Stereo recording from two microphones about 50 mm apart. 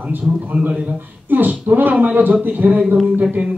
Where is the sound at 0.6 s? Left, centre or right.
Right.